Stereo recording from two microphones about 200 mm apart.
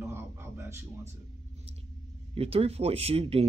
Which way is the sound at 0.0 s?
10° right (ahead or behind).